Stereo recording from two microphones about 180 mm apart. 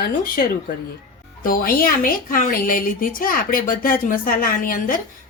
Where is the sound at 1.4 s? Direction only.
55° left (ahead or behind).